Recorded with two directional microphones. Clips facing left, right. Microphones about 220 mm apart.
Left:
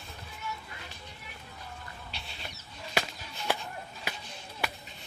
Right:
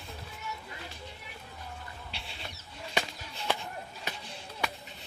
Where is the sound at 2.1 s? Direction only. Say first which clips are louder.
Right 1 dB; 30° right (ahead or behind).